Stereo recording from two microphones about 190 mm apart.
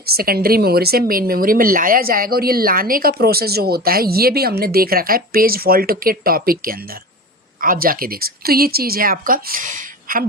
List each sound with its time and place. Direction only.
0.0 s speech: 55° right (ahead or behind)